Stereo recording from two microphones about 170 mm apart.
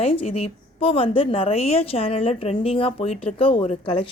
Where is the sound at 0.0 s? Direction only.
35° left (ahead or behind).